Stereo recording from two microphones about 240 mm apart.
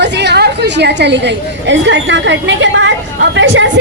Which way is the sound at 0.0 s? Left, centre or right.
Right.